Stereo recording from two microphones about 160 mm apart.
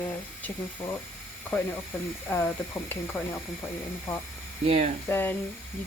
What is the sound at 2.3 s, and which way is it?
Speech, 15° left (ahead or behind).